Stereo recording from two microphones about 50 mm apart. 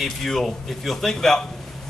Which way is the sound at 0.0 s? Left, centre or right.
Centre.